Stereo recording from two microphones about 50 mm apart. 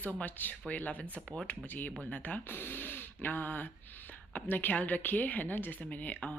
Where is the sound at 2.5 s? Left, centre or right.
Left.